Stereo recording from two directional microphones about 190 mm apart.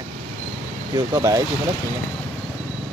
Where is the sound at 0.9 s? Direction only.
20° right (ahead or behind).